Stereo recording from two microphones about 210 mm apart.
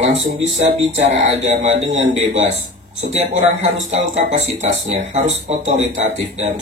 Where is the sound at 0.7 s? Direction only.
35° right (ahead or behind).